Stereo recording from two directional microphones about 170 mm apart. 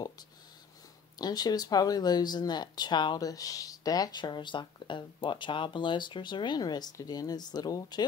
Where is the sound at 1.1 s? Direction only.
25° left (ahead or behind).